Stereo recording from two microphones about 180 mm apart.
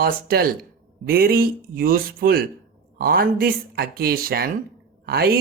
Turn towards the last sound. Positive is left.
turn(degrees=-60)  # may be behind; listen again after turning